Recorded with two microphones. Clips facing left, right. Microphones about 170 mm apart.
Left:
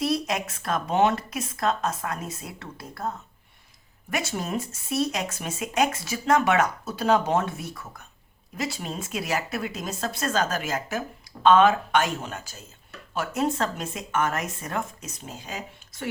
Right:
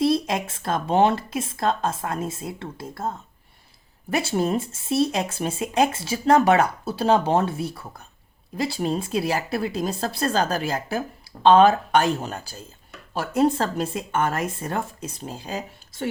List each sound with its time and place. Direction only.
0.0 s speech: 25° right (ahead or behind)